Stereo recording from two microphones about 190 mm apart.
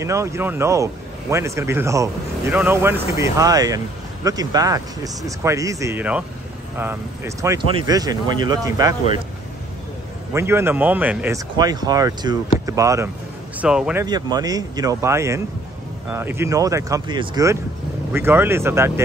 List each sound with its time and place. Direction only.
0.0 s a man's voice: 15° right (ahead or behind)
7.6 s speech: 25° right (ahead or behind)
10.3 s a man's voice: 15° right (ahead or behind)
11.5 s a man's voice: 20° right (ahead or behind)
13.6 s speech: 5° right (ahead or behind)
14.0 s a man's voice: 20° right (ahead or behind)